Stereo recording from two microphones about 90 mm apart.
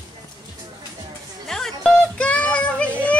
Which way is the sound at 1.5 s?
5° left (ahead or behind).